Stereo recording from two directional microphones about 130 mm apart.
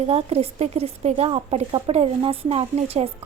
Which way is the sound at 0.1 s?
50° right (ahead or behind).